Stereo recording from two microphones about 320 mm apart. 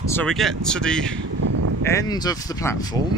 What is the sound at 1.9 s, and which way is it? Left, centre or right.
Speech, centre.